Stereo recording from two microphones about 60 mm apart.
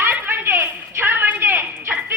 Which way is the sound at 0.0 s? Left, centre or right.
Right.